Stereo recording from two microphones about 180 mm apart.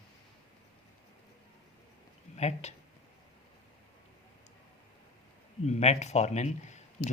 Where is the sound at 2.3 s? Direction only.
40° left (ahead or behind).